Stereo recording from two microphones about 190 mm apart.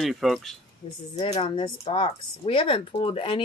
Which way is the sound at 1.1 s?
30° left (ahead or behind).